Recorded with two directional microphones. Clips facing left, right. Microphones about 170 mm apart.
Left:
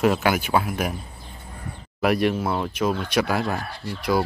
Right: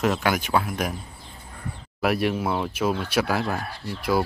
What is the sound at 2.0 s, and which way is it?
Speech, 5° right (ahead or behind).